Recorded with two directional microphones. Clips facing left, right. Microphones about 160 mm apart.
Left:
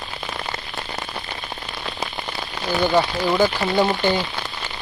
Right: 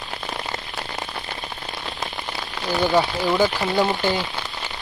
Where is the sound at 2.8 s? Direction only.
Centre (ahead or behind).